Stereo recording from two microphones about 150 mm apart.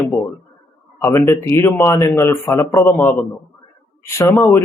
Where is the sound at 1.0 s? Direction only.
15° left (ahead or behind).